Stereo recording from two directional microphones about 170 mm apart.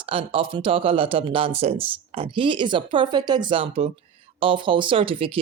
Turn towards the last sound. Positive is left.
turn(degrees=-30)  # may be behind; listen again after turning